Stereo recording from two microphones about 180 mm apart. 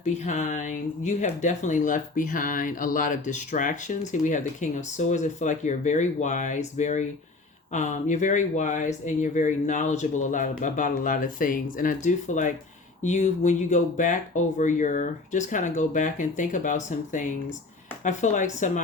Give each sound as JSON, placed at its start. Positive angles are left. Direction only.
{"t": 0.0, "sound": "speech", "side_deg": 40}